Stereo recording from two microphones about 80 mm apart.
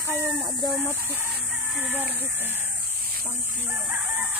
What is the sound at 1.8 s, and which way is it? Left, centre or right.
Speech, right.